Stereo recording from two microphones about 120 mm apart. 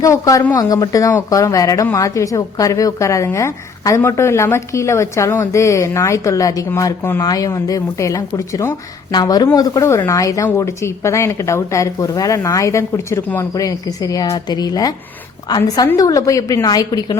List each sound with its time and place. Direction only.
0.0 s a woman's voice: 30° left (ahead or behind)